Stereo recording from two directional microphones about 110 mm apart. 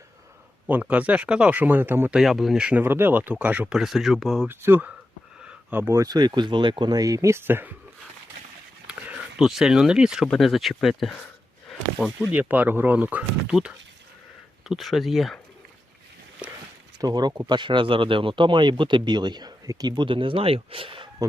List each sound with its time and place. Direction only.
0.7 s speech: 15° right (ahead or behind)
2.1 s speech: centre (ahead or behind)
2.8 s speech: 20° right (ahead or behind); by 4.4 s centre (ahead or behind)
4.4 s speech: 20° right (ahead or behind)
6.0 s speech: 40° right (ahead or behind); by 7.7 s 20° right (ahead or behind)
8.9 s speech: 5° right (ahead or behind)
12.2 s speech: 15° right (ahead or behind); by 15.4 s centre (ahead or behind)
17.0 s speech: 40° right (ahead or behind)
20.1 s speech: 50° right (ahead or behind)